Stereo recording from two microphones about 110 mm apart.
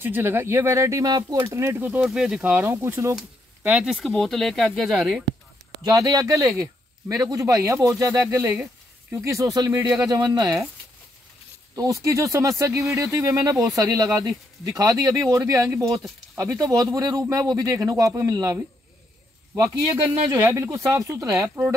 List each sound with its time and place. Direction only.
0.0 s speech: 20° right (ahead or behind)
1.4 s speech: 25° right (ahead or behind)
2.0 s speech: 5° right (ahead or behind); by 3.2 s 25° right (ahead or behind)
3.6 s speech: 10° right (ahead or behind)
5.9 s speech: 30° right (ahead or behind)
9.7 s speech: 15° right (ahead or behind)
9.9 s speech: 35° right (ahead or behind)
11.7 s speech: 30° right (ahead or behind)